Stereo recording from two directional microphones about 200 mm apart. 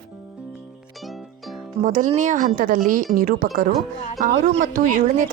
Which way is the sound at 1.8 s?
40° right (ahead or behind).